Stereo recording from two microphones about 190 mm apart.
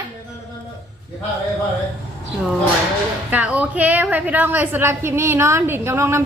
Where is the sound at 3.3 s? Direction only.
10° right (ahead or behind).